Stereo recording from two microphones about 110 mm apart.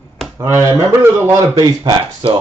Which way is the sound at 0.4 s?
25° right (ahead or behind).